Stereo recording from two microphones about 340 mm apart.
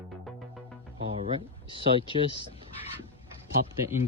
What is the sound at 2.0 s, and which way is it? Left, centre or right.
Speech, centre.